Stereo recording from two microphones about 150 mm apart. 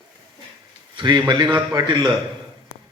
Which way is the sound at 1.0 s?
30° right (ahead or behind).